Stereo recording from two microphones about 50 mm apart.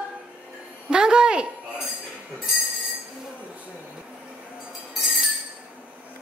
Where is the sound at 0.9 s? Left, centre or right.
Centre.